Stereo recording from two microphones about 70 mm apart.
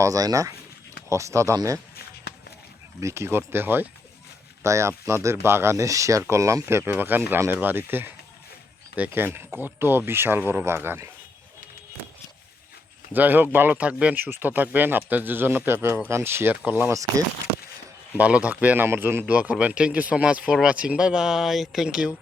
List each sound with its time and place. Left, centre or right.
0.0 s speech: right
1.1 s speech: right
3.0 s speech: right
4.6 s speech: right
13.1 s speech: right
16.9 s speech: right
18.2 s speech: centre
19.2 s speech: centre